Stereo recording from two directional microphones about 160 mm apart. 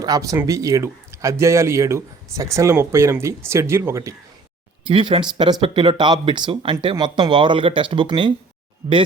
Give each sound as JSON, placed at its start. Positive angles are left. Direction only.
{"t": 0.0, "sound": "speech", "side_deg": -20}
{"t": 4.9, "sound": "speech", "side_deg": -30}